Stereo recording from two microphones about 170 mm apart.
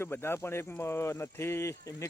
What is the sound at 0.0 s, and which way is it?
Speech, 15° left (ahead or behind).